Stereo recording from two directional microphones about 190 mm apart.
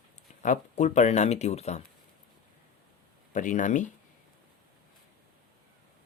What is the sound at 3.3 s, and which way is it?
Speech, 40° left (ahead or behind).